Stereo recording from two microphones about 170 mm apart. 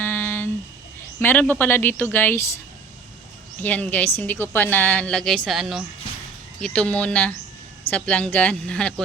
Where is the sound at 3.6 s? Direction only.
10° left (ahead or behind).